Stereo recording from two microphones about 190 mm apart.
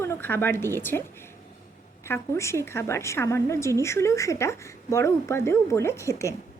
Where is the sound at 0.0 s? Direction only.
10° left (ahead or behind).